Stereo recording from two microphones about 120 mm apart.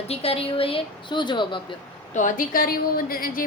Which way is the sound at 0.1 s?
55° left (ahead or behind).